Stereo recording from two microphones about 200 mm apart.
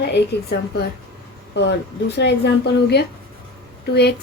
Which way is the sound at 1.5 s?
60° left (ahead or behind).